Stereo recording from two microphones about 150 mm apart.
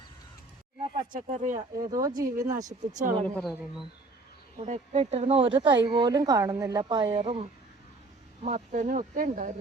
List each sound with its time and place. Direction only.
1.1 s speech: 55° right (ahead or behind)
1.5 s speech: 25° right (ahead or behind)
2.8 s speech: 55° right (ahead or behind)
3.2 s speech: 5° left (ahead or behind)
3.5 s speech: 5° right (ahead or behind)
4.6 s speech: 50° right (ahead or behind)
8.4 s speech: 55° right (ahead or behind)